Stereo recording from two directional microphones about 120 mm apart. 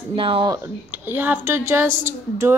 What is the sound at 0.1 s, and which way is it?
Speech, 50° right (ahead or behind).